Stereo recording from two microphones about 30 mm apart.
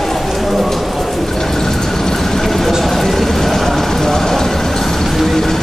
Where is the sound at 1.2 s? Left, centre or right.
Centre.